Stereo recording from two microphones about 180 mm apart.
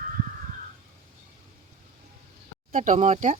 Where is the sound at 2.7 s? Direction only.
45° right (ahead or behind).